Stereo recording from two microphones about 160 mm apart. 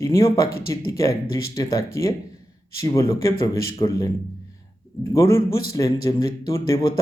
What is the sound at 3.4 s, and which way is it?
Speech, 20° left (ahead or behind).